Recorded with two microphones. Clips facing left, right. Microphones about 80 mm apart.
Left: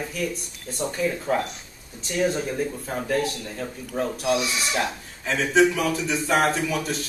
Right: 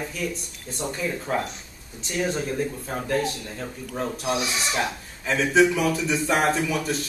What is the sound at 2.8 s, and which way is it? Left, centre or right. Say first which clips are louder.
Speech: left 1 dB; centre.